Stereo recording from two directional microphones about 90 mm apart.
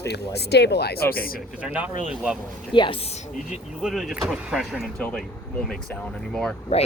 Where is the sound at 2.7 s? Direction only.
65° left (ahead or behind).